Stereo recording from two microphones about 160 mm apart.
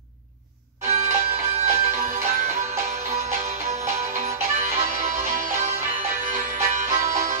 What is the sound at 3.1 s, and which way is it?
Music, 45° right (ahead or behind).